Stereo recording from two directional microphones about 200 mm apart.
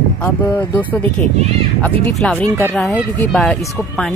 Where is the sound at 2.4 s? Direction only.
15° right (ahead or behind).